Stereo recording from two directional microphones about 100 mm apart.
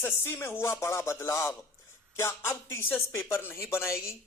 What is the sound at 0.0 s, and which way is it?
Speech, 25° left (ahead or behind).